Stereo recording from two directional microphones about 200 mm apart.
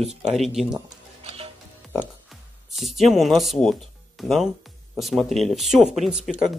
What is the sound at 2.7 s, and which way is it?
Speech, centre (ahead or behind).